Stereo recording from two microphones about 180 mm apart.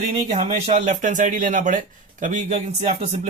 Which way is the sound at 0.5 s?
40° right (ahead or behind).